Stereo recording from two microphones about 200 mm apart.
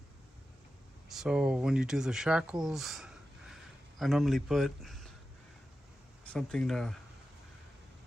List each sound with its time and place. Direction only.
1.0 s speech: centre (ahead or behind)
6.2 s speech: 5° left (ahead or behind)